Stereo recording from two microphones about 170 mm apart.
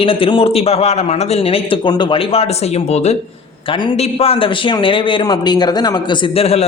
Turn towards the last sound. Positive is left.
turn(degrees=35)  # may be behind; listen again after turning